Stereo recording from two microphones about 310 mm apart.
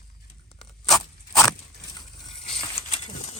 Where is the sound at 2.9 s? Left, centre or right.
Left.